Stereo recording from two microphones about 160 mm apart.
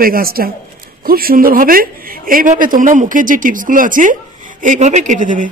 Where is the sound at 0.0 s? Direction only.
65° right (ahead or behind).